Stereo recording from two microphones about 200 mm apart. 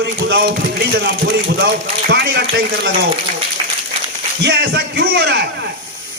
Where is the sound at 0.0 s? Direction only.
55° right (ahead or behind).